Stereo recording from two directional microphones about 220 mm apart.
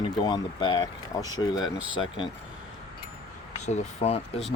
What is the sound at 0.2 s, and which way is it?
Speech, 20° left (ahead or behind).